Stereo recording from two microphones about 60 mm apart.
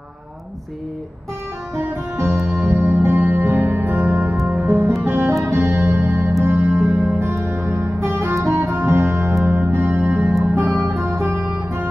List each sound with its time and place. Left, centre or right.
1.8 s music: right
7.6 s music: right